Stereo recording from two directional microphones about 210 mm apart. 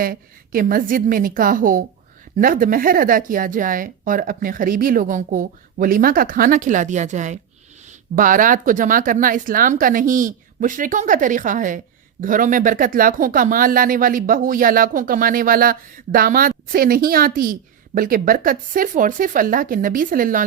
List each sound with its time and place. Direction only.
0.0 s speech: 45° right (ahead or behind)